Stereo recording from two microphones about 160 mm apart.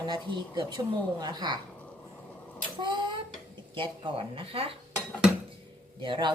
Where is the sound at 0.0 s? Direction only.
30° right (ahead or behind).